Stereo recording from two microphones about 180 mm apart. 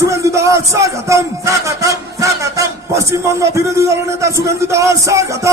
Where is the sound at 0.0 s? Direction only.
15° right (ahead or behind).